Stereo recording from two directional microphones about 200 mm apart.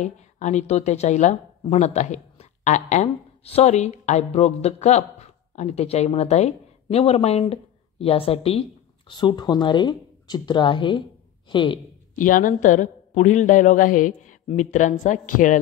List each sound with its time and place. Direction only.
0.0 s speech: 35° left (ahead or behind)
12.2 s speech: 40° left (ahead or behind)